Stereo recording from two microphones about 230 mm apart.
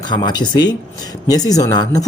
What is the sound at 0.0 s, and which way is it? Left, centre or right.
Speech, centre.